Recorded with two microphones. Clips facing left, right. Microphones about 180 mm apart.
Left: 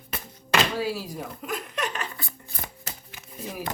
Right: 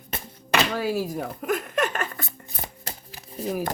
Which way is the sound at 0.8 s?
50° right (ahead or behind).